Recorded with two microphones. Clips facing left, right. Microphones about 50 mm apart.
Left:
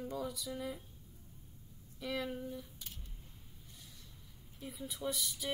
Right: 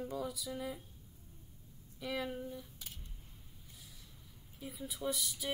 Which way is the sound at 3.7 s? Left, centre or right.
Centre.